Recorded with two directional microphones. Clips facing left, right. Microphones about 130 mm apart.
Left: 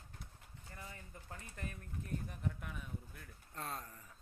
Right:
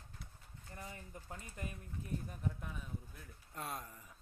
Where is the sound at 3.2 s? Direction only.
10° right (ahead or behind).